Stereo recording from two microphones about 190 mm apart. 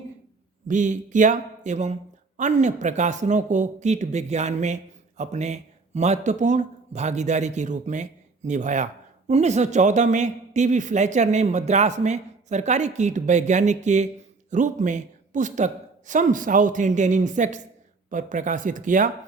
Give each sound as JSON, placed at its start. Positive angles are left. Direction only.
{"t": 0.7, "sound": "a man's voice", "side_deg": -40}